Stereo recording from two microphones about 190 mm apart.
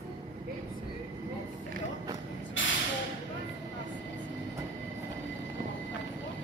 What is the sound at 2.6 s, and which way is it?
Vehicle, 75° left (ahead or behind).